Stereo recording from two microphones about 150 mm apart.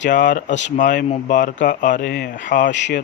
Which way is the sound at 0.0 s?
60° left (ahead or behind).